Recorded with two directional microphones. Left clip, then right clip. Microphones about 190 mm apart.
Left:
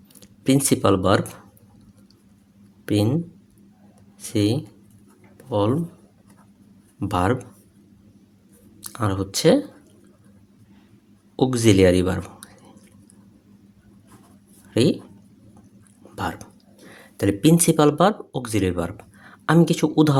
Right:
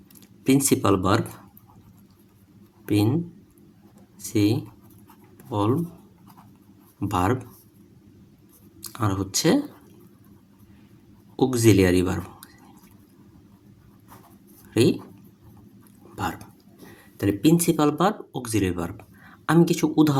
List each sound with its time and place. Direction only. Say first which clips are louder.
0.2 s speech: left 1 dB; 20° left (ahead or behind)
2.8 s speech: left 1 dB; 20° left (ahead or behind)
4.3 s speech: left 1 dB; 20° left (ahead or behind)
7.0 s speech: left 2 dB; 20° left (ahead or behind)
8.8 s speech: left 2 dB; 20° left (ahead or behind)
11.3 s speech: left 2 dB; 15° left (ahead or behind)
14.7 s speech: left 1 dB; 20° left (ahead or behind)
16.1 s speech: left 1 dB; 20° left (ahead or behind)
16.9 s speech: left 3 dB; 30° left (ahead or behind)